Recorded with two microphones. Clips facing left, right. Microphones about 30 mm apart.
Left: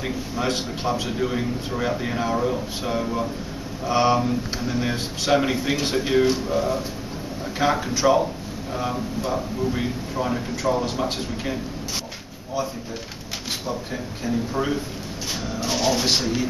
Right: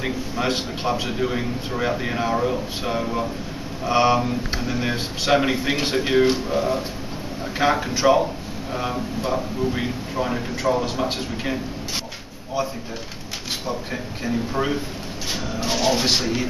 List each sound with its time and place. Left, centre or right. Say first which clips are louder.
0.0 s a man's voice: right 1 dB; centre
14.2 s a man's voice: right 1 dB; centre